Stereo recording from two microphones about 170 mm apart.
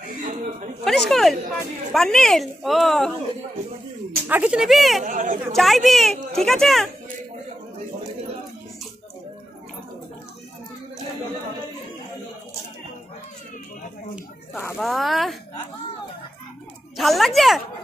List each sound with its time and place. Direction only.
0.8 s speech: centre (ahead or behind)
4.3 s speech: 10° right (ahead or behind)
5.0 s speech: 50° right (ahead or behind)
5.5 s speech: centre (ahead or behind)
14.8 s speech: centre (ahead or behind)
16.9 s speech: centre (ahead or behind)